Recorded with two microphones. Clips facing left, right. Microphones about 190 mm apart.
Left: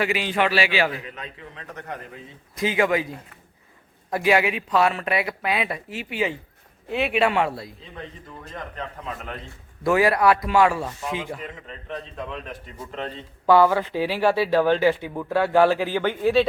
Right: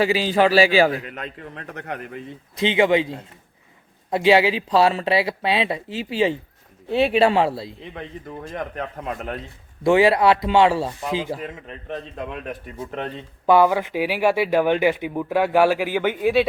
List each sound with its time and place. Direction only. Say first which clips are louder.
0.0 s a man's voice: right 5 dB; 30° right (ahead or behind)
1.2 s a man's voice: right 5 dB; 55° right (ahead or behind)
2.6 s speech: right 4 dB; 25° right (ahead or behind)
8.4 s a man's voice: right 4 dB; 60° right (ahead or behind)
9.8 s speech: right 3 dB; 25° right (ahead or behind)
12.3 s speech: right 3 dB; 55° right (ahead or behind)
13.4 s speech: right 1 dB; 15° right (ahead or behind)